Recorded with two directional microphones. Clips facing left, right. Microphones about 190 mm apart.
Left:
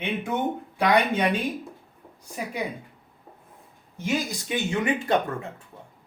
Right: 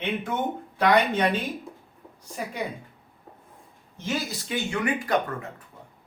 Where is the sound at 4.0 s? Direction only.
15° left (ahead or behind).